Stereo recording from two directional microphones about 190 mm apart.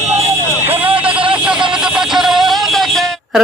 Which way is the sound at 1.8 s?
Centre (ahead or behind).